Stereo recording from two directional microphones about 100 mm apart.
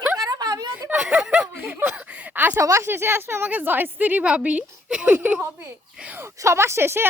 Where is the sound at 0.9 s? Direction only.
10° right (ahead or behind).